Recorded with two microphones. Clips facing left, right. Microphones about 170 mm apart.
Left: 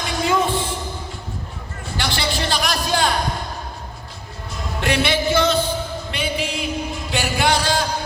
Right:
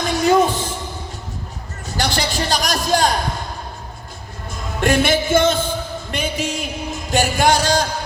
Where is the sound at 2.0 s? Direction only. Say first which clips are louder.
Right 2 dB; 40° right (ahead or behind).